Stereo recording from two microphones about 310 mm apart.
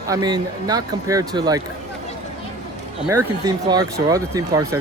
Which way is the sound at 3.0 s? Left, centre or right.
Centre.